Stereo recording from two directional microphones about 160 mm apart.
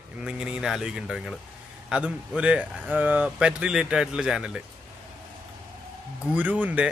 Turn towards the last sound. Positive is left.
turn(degrees=-10)  # may be behind; listen again after turning